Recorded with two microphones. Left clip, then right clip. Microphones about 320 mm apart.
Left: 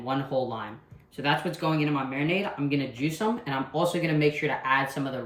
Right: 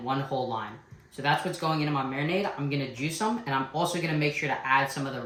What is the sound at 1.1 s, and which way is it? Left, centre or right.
Speech, centre.